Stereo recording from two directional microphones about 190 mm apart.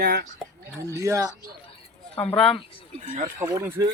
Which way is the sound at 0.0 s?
55° right (ahead or behind).